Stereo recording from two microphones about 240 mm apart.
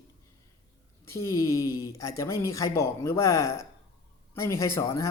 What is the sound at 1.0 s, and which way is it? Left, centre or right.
Speech, centre.